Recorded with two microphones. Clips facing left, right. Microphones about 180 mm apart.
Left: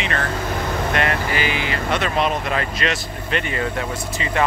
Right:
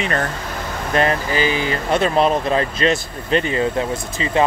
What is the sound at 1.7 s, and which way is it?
Speech, 30° right (ahead or behind).